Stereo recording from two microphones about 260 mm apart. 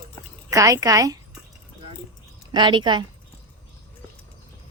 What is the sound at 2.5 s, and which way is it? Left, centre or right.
Speech, centre.